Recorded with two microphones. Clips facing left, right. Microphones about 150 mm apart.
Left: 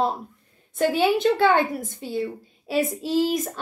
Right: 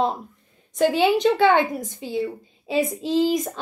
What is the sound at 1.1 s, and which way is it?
Speech, 20° right (ahead or behind).